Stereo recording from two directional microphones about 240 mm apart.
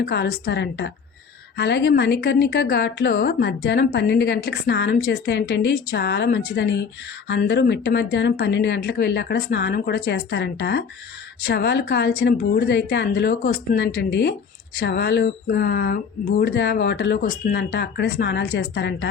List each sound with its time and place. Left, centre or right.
0.0 s a woman's voice: left